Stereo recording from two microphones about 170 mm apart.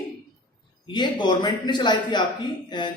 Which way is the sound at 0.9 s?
25° left (ahead or behind).